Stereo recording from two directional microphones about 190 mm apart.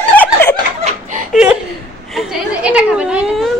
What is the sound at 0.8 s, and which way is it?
Laughter, 40° right (ahead or behind).